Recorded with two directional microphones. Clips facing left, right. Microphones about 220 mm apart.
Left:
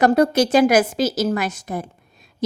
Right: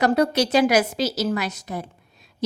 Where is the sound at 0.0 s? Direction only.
50° left (ahead or behind).